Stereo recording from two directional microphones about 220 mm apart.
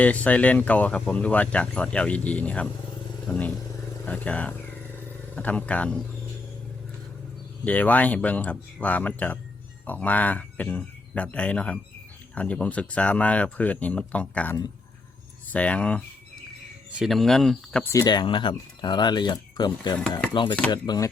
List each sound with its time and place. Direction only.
0.0 s speech: 5° left (ahead or behind)
7.6 s speech: 5° left (ahead or behind)
17.9 s speech: 20° left (ahead or behind)
20.0 s speech: 5° left (ahead or behind)
20.3 s speech: 20° left (ahead or behind)